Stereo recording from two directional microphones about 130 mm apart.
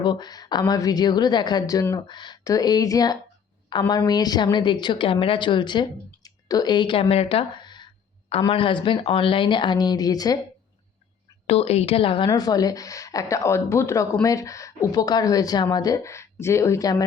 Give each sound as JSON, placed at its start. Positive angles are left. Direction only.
{"t": 0.0, "sound": "a woman's voice", "side_deg": 35}
{"t": 8.3, "sound": "a woman's voice", "side_deg": 45}
{"t": 11.4, "sound": "a woman's voice", "side_deg": 50}
{"t": 12.3, "sound": "speech", "side_deg": 30}